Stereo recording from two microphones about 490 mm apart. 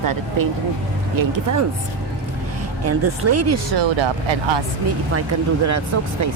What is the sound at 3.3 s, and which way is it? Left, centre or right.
Speech, right.